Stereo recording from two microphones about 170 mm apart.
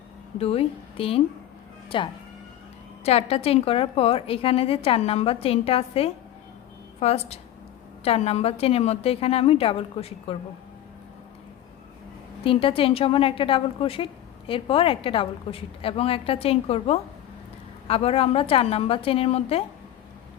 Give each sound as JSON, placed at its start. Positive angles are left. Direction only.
{"t": 0.3, "sound": "a woman's voice", "side_deg": 35}
{"t": 12.4, "sound": "a woman's voice", "side_deg": 30}